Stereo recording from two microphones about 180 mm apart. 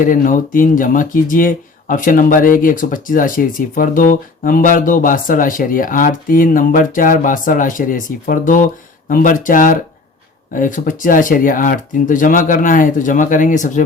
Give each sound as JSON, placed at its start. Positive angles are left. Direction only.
{"t": 0.0, "sound": "speech", "side_deg": 50}